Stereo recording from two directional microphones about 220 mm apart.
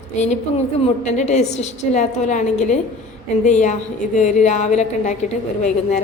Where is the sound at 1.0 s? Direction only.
30° left (ahead or behind).